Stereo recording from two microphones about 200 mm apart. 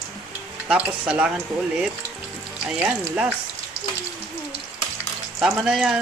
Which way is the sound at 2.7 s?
5° right (ahead or behind).